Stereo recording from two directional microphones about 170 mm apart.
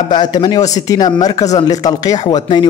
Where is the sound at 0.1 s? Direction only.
25° left (ahead or behind).